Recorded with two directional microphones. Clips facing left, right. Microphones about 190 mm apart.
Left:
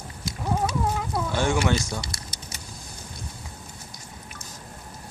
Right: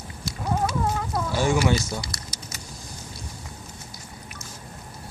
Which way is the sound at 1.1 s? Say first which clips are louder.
Right 2 dB; centre (ahead or behind).